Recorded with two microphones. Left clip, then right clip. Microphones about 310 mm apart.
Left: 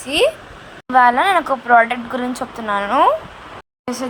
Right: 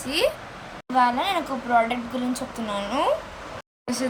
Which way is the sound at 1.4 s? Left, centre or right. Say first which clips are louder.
Left 9 dB; left.